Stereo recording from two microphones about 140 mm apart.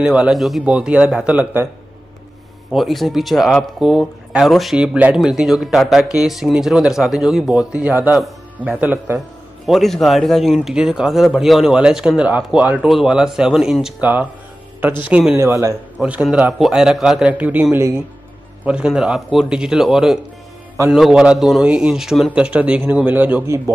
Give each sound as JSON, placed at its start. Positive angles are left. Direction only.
{"t": 0.0, "sound": "a man's voice", "side_deg": -10}
{"t": 2.7, "sound": "a man's voice", "side_deg": 0}
{"t": 9.7, "sound": "a man's voice", "side_deg": 0}
{"t": 15.3, "sound": "speech", "side_deg": -20}
{"t": 16.0, "sound": "a man's voice", "side_deg": -10}